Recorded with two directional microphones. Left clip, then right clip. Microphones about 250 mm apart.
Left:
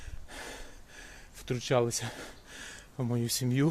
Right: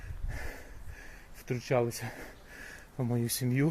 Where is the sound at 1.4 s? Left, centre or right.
Centre.